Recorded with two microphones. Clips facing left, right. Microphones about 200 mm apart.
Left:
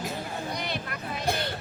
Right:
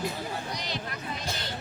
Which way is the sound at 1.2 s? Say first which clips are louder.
Left 12 dB; 55° left (ahead or behind).